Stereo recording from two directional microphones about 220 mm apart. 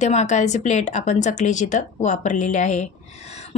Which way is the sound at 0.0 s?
30° left (ahead or behind).